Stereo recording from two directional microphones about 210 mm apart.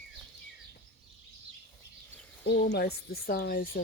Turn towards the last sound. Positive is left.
turn(degrees=45)  # may be behind; listen again after turning